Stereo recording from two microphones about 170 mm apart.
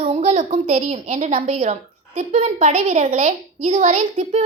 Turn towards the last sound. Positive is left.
turn(degrees=-40)  # may be behind; listen again after turning